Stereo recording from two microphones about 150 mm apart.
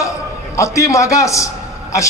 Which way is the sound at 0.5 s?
20° left (ahead or behind).